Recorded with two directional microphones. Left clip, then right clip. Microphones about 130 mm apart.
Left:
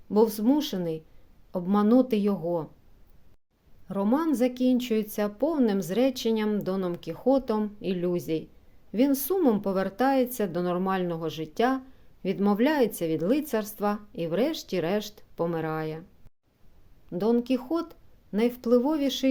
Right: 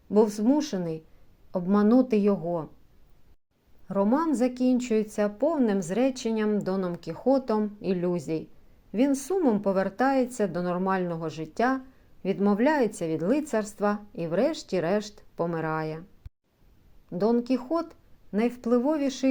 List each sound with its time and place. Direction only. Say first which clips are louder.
0.1 s a woman's voice: even; 20° left (ahead or behind)
3.8 s a woman's voice: right 1 dB; 15° left (ahead or behind)
17.1 s a woman's voice: even; 20° left (ahead or behind)